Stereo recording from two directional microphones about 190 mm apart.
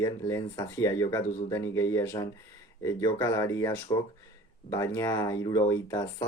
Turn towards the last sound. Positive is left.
turn(degrees=15)  # may be behind; listen again after turning